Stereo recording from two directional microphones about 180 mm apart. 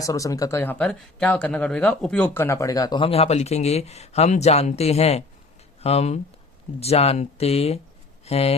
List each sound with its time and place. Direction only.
0.0 s speech: 20° left (ahead or behind); by 8.5 s 35° left (ahead or behind)